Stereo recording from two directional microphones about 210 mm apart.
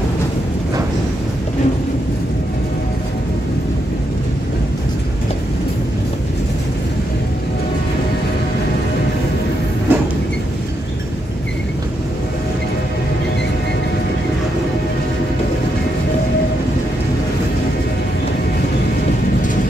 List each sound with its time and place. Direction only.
9.9 s vehicle: 10° right (ahead or behind)